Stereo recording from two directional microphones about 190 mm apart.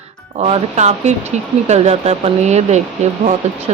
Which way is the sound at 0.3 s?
35° right (ahead or behind).